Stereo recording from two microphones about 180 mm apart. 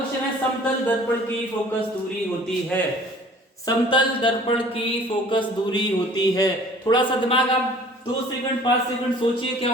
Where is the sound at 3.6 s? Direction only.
25° left (ahead or behind).